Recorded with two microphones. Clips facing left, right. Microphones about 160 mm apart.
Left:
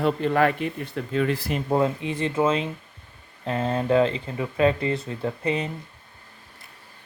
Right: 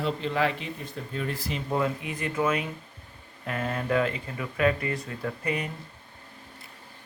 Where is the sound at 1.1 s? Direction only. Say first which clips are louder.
Left 8 dB; 90° left; by 1.6 s 60° left (ahead or behind).